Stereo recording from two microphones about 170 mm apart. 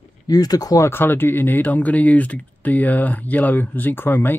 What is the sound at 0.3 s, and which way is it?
Speech, 20° left (ahead or behind).